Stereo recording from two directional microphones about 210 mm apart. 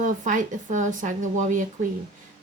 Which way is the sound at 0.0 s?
40° right (ahead or behind).